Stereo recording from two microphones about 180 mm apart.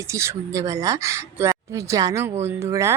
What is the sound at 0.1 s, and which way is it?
Speech, 15° right (ahead or behind).